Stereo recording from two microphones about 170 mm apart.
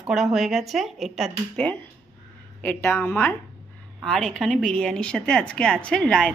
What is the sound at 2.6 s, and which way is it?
Speech, 15° left (ahead or behind).